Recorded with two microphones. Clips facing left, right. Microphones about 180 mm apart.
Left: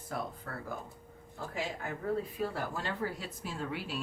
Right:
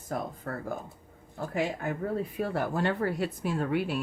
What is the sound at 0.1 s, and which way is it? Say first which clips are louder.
Speech: right 5 dB; 45° right (ahead or behind).